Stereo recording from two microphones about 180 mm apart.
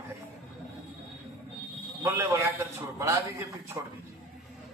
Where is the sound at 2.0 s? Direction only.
15° right (ahead or behind).